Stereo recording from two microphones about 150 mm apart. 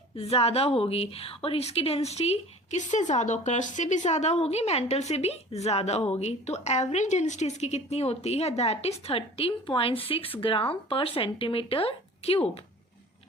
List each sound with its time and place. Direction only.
0.2 s a woman's voice: 40° left (ahead or behind)